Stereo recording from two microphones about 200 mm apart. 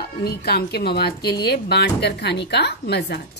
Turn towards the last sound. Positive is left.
turn(degrees=55)  # may be behind; listen again after turning